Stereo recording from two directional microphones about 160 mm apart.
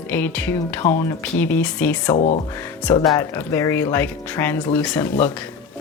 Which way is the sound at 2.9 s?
25° left (ahead or behind).